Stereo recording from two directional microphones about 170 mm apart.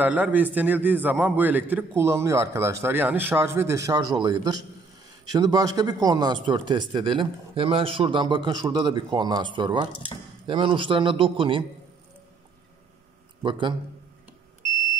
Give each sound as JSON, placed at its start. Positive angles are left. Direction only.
{"t": 0.0, "sound": "a man's voice", "side_deg": -10}
{"t": 13.4, "sound": "a man's voice", "side_deg": -30}